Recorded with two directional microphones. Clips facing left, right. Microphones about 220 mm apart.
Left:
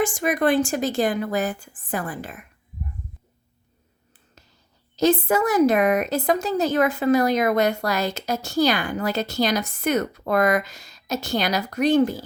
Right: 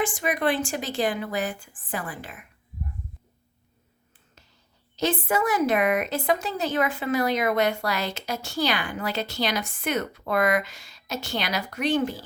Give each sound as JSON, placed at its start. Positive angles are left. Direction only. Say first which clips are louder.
{"t": 0.0, "sound": "a woman's voice", "louder": "left 4 dB", "side_deg": 45}
{"t": 4.9, "sound": "a woman's voice", "louder": "left 6 dB", "side_deg": 40}